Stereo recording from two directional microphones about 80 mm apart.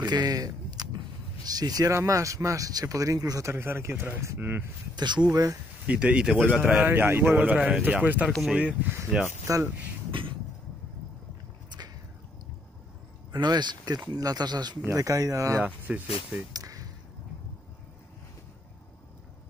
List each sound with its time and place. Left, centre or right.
0.0 s a sound: right
1.4 s speech: right
2.0 s speech: right
3.5 s speech: right
4.9 s speech: right
5.3 s speech: right
5.9 s speech: centre
6.3 s speech: right
9.5 s speech: right
13.3 s speech: right
15.0 s speech: right
15.6 s speech: centre
16.5 s a sound: right